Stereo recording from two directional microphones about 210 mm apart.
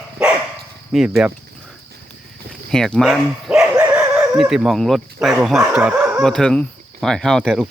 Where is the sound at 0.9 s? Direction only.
Centre (ahead or behind).